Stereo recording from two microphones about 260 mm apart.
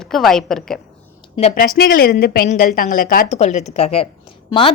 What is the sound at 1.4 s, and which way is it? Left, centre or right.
A woman's voice, left.